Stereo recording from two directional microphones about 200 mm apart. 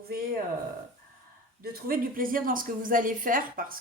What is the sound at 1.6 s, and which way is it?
Speech, 50° right (ahead or behind).